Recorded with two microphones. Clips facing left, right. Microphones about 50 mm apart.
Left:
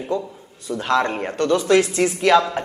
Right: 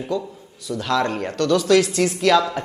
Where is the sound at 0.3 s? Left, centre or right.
Left.